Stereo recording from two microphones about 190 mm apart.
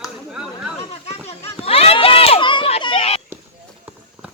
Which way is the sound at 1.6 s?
30° left (ahead or behind).